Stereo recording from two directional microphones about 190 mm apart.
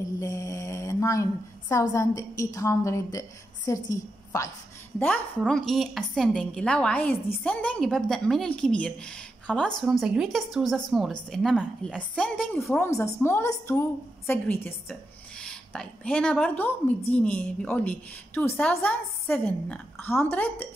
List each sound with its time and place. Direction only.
0.2 s a woman's voice: 15° left (ahead or behind)